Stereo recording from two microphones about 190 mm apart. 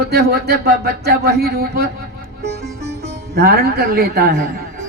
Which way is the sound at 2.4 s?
55° right (ahead or behind).